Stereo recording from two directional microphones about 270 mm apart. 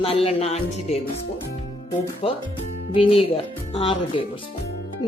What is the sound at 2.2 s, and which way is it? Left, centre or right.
Speech, left.